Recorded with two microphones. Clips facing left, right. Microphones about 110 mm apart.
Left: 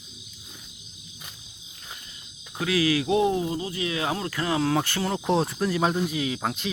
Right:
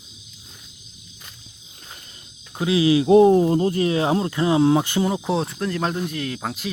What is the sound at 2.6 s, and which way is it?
Speech, 25° right (ahead or behind).